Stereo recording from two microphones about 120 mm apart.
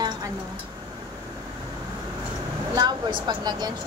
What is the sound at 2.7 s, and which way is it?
A woman's voice, 40° right (ahead or behind).